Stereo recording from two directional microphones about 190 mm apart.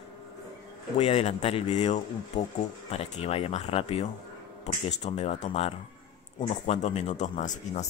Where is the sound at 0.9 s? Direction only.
30° left (ahead or behind).